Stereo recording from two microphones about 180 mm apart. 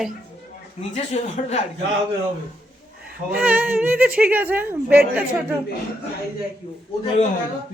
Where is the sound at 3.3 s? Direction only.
10° right (ahead or behind).